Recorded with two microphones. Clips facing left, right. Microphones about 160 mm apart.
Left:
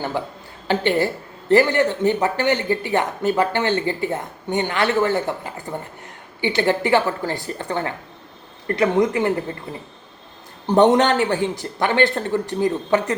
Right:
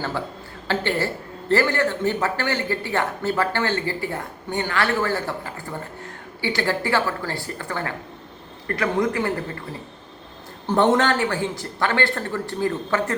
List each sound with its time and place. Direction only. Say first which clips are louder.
0.7 s speech: left 4 dB; 15° left (ahead or behind)
10.7 s speech: left 4 dB; 20° left (ahead or behind)